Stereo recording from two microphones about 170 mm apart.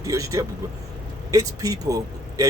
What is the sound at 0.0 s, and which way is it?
Speech, 20° right (ahead or behind).